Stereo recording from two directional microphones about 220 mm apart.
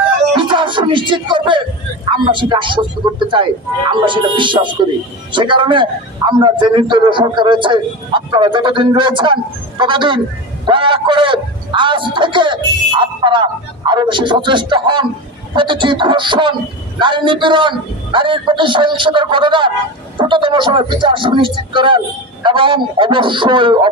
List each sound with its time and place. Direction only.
0.3 s a man's voice: 20° right (ahead or behind)